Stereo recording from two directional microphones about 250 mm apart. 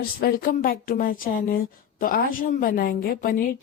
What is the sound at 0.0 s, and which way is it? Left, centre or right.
Speech, left.